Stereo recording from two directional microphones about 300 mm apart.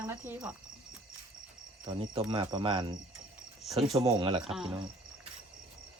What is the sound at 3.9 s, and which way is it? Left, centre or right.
Speech, centre.